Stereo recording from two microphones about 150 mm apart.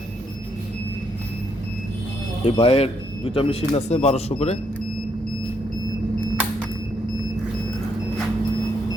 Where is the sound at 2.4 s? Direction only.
40° left (ahead or behind).